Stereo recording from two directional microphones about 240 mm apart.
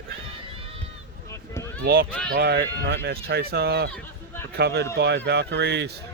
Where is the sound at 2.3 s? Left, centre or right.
Right.